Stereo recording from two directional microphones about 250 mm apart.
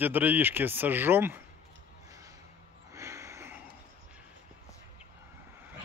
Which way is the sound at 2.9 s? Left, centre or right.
Centre.